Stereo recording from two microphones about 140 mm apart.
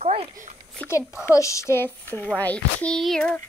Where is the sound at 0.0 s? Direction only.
40° right (ahead or behind).